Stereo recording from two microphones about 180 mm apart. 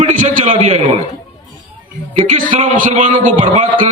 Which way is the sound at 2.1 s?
40° right (ahead or behind).